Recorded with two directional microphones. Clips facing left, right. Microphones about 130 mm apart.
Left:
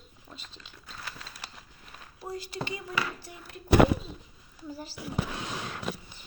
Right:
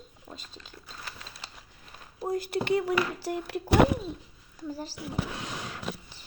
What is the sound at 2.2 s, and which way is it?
Speech, 50° right (ahead or behind).